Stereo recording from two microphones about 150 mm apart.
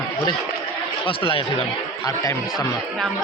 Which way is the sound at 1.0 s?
35° left (ahead or behind).